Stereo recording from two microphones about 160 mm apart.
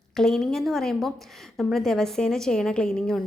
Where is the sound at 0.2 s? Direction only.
Centre (ahead or behind).